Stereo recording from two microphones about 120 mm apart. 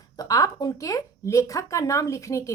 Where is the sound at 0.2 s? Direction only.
30° left (ahead or behind).